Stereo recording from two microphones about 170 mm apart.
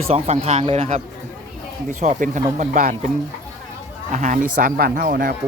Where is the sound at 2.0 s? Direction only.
45° right (ahead or behind).